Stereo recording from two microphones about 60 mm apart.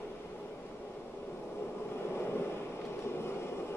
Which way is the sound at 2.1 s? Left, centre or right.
Left.